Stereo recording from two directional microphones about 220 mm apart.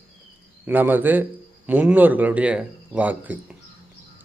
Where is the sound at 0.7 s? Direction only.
10° right (ahead or behind).